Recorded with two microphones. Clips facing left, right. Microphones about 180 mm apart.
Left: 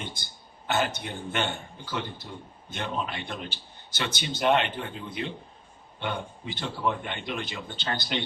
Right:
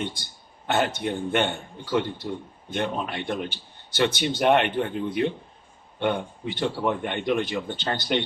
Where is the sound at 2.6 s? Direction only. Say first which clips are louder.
Right 5 dB; 55° right (ahead or behind).